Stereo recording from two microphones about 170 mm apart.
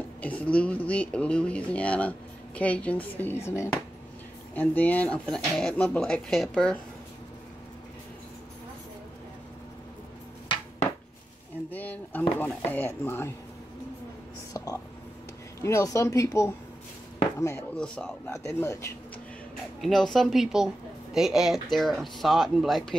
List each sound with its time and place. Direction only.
0.2 s speech: 10° left (ahead or behind)
11.7 s speech: 10° left (ahead or behind)
14.5 s whispering: 20° left (ahead or behind)
15.6 s speech: 15° left (ahead or behind)
17.7 s a woman's voice: 5° left (ahead or behind)
18.3 s speech: 15° left (ahead or behind)
19.8 s a woman's voice: centre (ahead or behind)